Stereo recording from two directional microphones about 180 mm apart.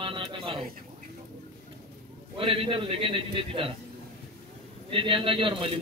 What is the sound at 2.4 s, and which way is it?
A man's voice, 30° right (ahead or behind).